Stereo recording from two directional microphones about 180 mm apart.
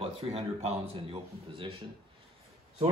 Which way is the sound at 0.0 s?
35° right (ahead or behind).